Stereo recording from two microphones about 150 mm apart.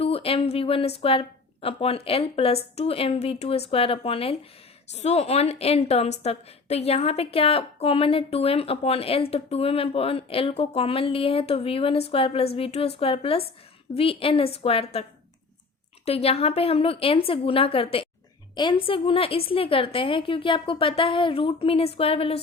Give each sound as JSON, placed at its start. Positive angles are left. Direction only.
{"t": 0.0, "sound": "a woman's voice", "side_deg": 40}
{"t": 16.0, "sound": "a woman's voice", "side_deg": 40}